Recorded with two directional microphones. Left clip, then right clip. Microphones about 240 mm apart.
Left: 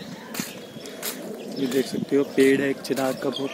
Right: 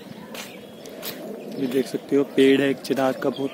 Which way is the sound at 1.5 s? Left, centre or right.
Centre.